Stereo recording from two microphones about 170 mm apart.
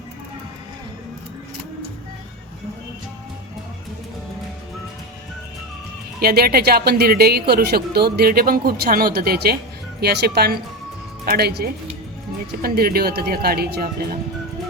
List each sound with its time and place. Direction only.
6.2 s speech: 65° right (ahead or behind)